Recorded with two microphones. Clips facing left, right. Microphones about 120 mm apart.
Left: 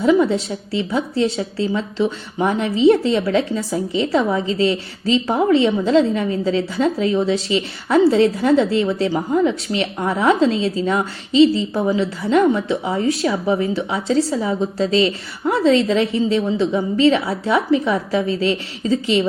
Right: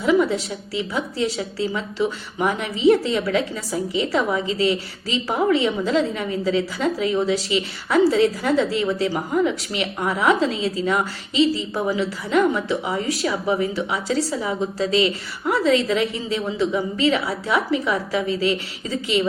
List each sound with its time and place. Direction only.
0.0 s a woman's voice: 30° left (ahead or behind)